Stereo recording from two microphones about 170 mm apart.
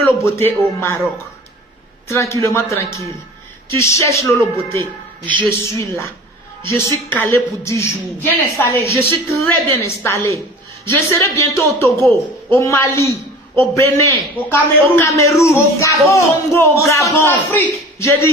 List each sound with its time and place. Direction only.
0.0 s a woman's voice: 15° left (ahead or behind)
2.0 s a woman's voice: 15° left (ahead or behind)